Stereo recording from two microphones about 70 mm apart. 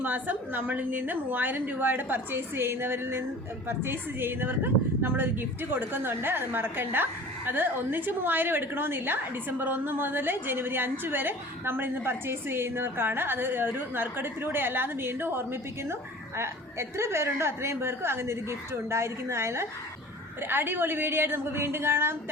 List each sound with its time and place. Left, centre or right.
0.0 s a woman's voice: right